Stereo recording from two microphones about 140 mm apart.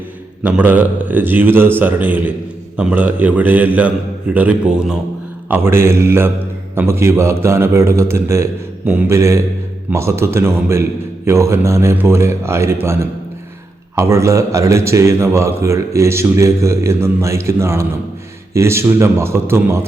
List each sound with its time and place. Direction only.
0.4 s a man's voice: 10° right (ahead or behind)
5.5 s a man's voice: 15° right (ahead or behind)